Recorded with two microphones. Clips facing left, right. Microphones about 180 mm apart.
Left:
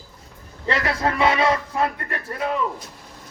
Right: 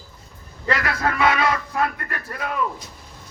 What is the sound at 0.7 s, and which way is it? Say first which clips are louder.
Speech: left 1 dB; 30° left (ahead or behind).